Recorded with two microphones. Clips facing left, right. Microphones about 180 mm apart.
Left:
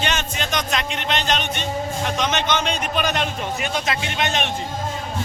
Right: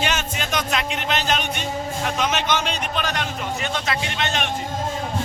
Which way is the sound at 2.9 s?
20° left (ahead or behind).